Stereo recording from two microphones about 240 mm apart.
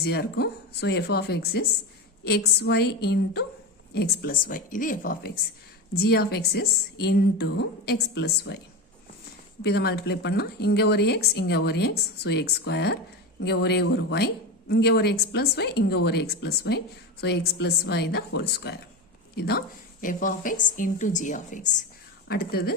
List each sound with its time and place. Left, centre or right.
0.0 s a woman's voice: left
9.6 s a woman's voice: left